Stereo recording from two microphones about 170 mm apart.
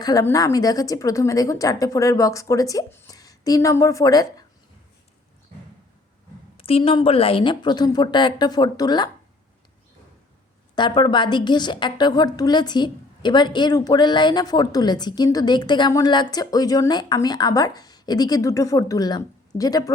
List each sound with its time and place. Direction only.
0.0 s a woman's voice: 20° left (ahead or behind)
6.6 s a woman's voice: 35° left (ahead or behind)
10.8 s a woman's voice: 25° left (ahead or behind)